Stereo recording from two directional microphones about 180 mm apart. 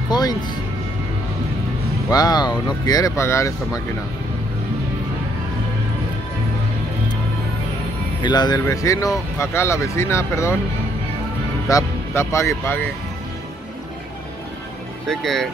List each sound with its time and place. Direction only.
0.1 s music: 20° left (ahead or behind)
2.0 s speech: 20° left (ahead or behind)
8.2 s speech: 25° left (ahead or behind)
11.7 s speech: 15° left (ahead or behind)
15.0 s speech: centre (ahead or behind)